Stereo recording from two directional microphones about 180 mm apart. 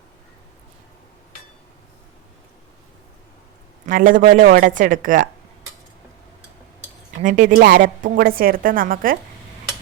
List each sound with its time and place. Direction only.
3.8 s a woman's voice: 50° right (ahead or behind)
7.2 s a woman's voice: 45° right (ahead or behind)